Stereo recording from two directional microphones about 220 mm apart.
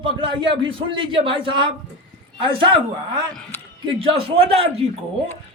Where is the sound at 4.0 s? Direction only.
25° right (ahead or behind).